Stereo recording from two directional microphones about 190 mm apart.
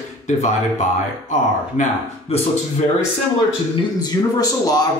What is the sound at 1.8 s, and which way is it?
Speech, 40° left (ahead or behind).